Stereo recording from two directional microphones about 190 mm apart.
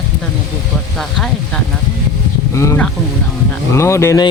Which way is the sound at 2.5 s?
15° left (ahead or behind).